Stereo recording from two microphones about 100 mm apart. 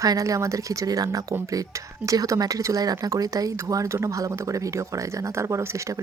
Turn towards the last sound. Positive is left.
turn(degrees=-30)  # may be behind; listen again after turning